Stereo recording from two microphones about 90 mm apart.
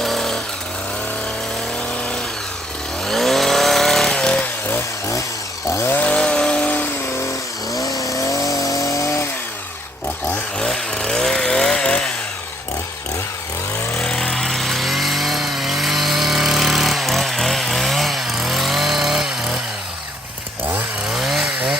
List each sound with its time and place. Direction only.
0.0 s a sound: 5° left (ahead or behind)
3.1 s chainsaw: centre (ahead or behind)
5.6 s chainsaw: 35° left (ahead or behind)
5.9 s chainsaw: 15° left (ahead or behind)
7.7 s vehicle: 40° left (ahead or behind)
10.2 s chainsaw: 5° left (ahead or behind)
13.9 s vehicle: 5° left (ahead or behind)
21.1 s chainsaw: 5° right (ahead or behind)